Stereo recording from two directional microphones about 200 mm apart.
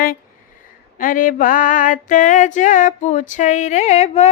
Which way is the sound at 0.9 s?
45° left (ahead or behind).